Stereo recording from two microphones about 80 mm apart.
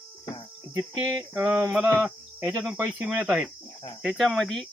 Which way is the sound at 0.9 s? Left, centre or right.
Right.